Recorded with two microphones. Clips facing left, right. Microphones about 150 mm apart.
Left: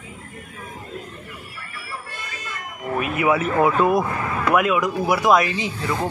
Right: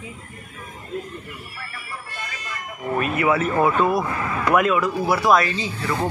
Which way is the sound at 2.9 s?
15° left (ahead or behind).